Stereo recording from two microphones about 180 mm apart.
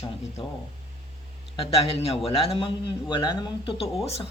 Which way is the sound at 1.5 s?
35° left (ahead or behind).